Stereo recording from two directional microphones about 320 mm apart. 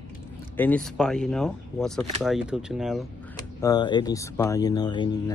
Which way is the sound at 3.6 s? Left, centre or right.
Centre.